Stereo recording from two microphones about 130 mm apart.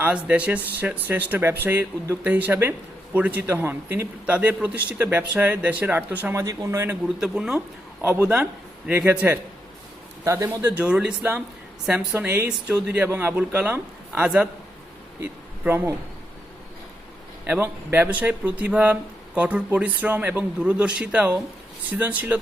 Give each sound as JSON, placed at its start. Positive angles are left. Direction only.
{"t": 0.0, "sound": "speech", "side_deg": -10}
{"t": 6.4, "sound": "speech", "side_deg": -25}
{"t": 7.2, "sound": "speech", "side_deg": -5}
{"t": 10.2, "sound": "speech", "side_deg": -20}
{"t": 17.4, "sound": "speech", "side_deg": -15}